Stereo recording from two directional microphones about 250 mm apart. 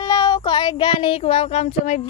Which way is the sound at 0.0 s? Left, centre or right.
Centre.